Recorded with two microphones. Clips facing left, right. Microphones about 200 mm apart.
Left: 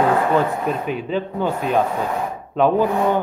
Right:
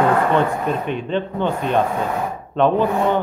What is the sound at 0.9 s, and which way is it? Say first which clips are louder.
Speech: right 1 dB; 5° left (ahead or behind).